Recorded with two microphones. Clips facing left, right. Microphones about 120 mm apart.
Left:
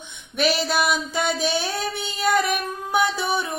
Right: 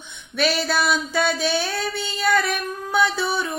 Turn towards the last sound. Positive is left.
turn(degrees=20)  # may be behind; listen again after turning